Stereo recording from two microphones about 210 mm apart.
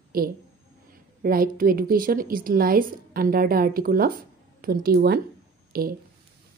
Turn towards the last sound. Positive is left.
turn(degrees=-45)  # may be behind; listen again after turning